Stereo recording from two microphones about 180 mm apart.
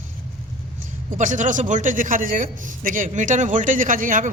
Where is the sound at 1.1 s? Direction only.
45° right (ahead or behind).